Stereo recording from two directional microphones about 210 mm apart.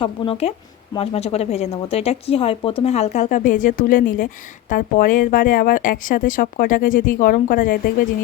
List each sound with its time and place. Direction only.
0.0 s speech: 25° left (ahead or behind)